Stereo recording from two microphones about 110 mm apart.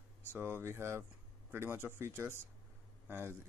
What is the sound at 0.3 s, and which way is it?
Speech, 20° right (ahead or behind).